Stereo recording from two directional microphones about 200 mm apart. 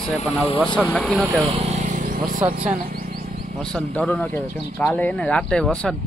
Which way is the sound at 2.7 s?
45° right (ahead or behind).